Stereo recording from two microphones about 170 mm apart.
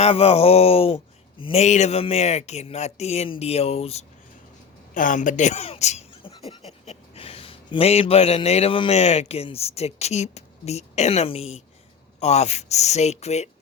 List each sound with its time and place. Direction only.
0.0 s speech: 35° left (ahead or behind)
4.9 s speech: 50° left (ahead or behind)